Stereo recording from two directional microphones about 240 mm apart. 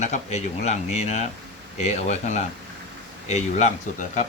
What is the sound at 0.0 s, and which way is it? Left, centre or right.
A man's voice, left.